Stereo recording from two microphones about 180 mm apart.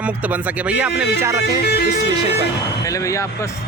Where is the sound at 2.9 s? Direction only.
15° left (ahead or behind).